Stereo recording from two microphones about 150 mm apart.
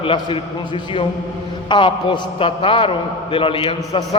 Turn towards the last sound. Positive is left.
turn(degrees=35)  # may be behind; listen again after turning